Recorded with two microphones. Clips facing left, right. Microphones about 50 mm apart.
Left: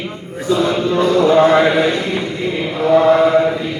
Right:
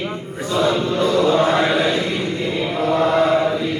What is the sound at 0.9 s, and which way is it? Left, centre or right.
Mantra, left.